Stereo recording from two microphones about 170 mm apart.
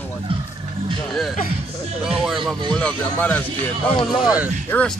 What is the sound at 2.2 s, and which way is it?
Speech, centre (ahead or behind).